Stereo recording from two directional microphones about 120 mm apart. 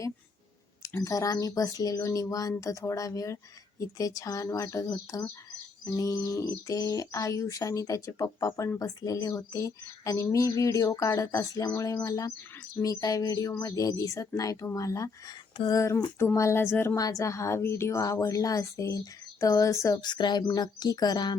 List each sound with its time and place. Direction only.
0.8 s a woman's voice: 25° left (ahead or behind)
20.0 s speech: 40° left (ahead or behind)